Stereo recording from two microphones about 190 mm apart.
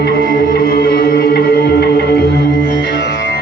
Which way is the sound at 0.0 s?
55° left (ahead or behind).